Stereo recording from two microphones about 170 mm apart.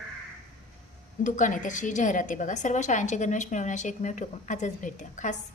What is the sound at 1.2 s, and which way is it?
A woman's voice, 50° left (ahead or behind).